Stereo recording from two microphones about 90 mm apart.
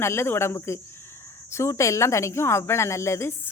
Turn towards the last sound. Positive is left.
turn(degrees=30)  # may be behind; listen again after turning